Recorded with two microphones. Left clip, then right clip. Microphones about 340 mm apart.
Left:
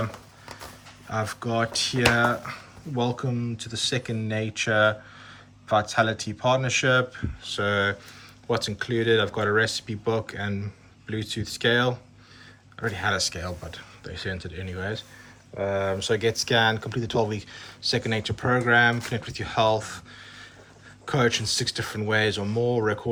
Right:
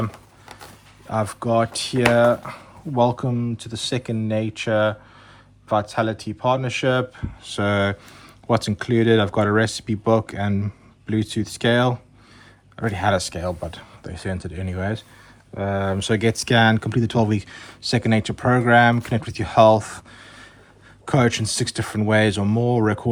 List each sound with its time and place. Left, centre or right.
1.1 s speech: centre
15.5 s speech: right
15.9 s speech: right